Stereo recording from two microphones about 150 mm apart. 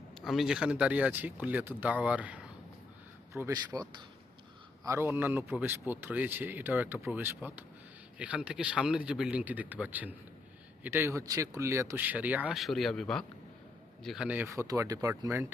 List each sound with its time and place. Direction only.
0.3 s speech: 5° right (ahead or behind)
3.3 s speech: 20° right (ahead or behind)
12.5 s speech: centre (ahead or behind)
14.3 s speech: 15° right (ahead or behind)